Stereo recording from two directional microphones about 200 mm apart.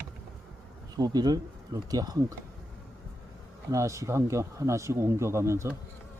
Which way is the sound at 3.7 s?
15° right (ahead or behind).